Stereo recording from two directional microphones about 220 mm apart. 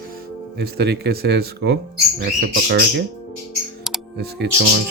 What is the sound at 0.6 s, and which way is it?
Speech, 45° right (ahead or behind).